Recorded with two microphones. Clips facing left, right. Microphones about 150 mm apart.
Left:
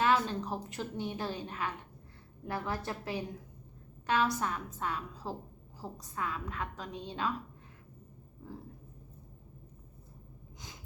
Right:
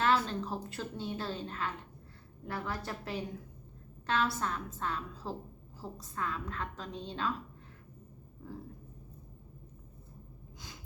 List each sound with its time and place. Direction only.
0.0 s a woman's voice: 15° left (ahead or behind)